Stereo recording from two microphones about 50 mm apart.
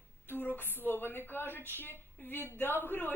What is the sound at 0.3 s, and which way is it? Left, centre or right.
A woman's voice, left.